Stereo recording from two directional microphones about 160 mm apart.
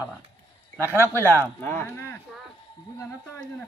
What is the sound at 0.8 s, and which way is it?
Speech, 15° left (ahead or behind).